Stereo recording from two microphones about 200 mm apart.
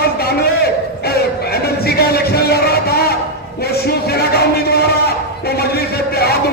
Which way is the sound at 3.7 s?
50° left (ahead or behind).